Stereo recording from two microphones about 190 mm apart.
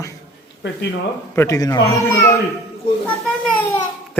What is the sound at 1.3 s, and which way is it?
Speech, 15° left (ahead or behind).